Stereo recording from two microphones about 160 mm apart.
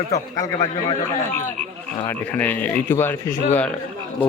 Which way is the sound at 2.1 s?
10° left (ahead or behind).